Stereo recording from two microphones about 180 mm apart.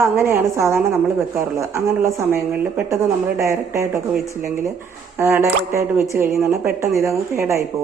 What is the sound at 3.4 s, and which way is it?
Speech, 15° right (ahead or behind).